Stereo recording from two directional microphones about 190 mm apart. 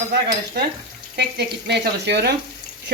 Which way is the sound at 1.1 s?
60° right (ahead or behind).